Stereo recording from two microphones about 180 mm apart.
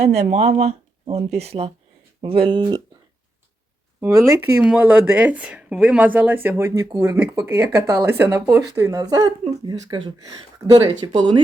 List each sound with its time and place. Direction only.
0.0 s speech: 35° right (ahead or behind)
4.0 s speech: 15° right (ahead or behind)